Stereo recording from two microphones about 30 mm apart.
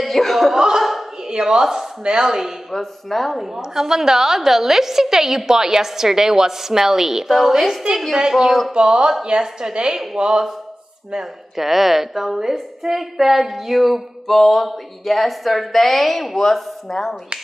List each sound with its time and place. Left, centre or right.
0.0 s a sound: centre
0.6 s a sound: centre
2.0 s speech: right
2.7 s speech: centre
3.3 s a woman's voice: centre
3.5 s a woman's voice: centre
11.5 s a woman's voice: centre
14.2 s speech: centre